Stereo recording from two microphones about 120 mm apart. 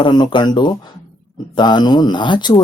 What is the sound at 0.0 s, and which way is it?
Speech, 40° left (ahead or behind).